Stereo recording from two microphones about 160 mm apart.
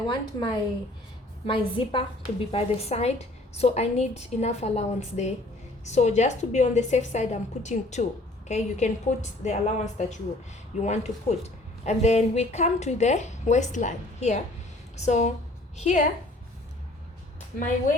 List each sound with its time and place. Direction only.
0.0 s a woman's voice: 30° left (ahead or behind); by 16.0 s 50° left (ahead or behind)